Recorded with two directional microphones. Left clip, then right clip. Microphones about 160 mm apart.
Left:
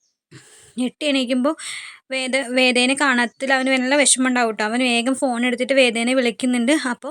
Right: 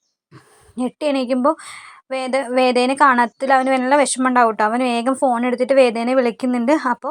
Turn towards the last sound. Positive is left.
turn(degrees=20)  # may be behind; listen again after turning